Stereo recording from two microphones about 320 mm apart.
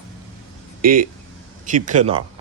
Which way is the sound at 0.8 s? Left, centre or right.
Right.